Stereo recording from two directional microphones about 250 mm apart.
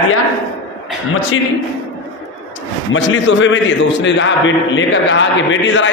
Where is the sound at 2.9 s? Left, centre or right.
Left.